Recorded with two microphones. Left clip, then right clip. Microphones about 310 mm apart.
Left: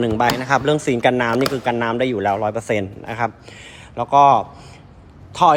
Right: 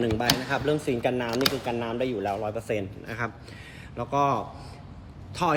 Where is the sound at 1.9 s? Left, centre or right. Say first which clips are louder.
Left 9 dB; left.